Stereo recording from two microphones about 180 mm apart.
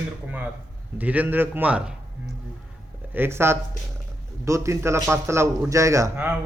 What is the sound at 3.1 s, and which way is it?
A man's voice, 15° right (ahead or behind).